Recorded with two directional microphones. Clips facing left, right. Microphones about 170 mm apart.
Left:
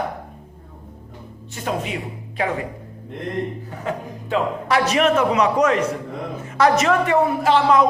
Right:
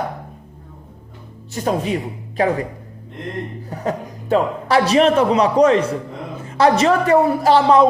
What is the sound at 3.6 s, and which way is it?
A man's voice, 40° right (ahead or behind).